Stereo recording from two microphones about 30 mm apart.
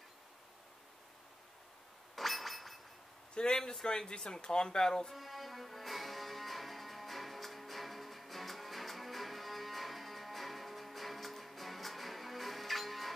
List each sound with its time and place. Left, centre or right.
2.1 s a sound: centre
3.3 s speech: left
5.1 s music: centre